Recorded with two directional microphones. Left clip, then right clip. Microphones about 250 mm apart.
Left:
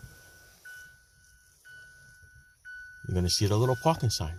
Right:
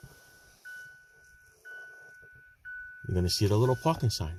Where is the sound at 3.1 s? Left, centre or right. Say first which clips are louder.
Even; centre.